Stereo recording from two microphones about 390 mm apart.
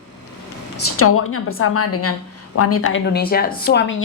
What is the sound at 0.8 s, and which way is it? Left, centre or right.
A woman's voice, left.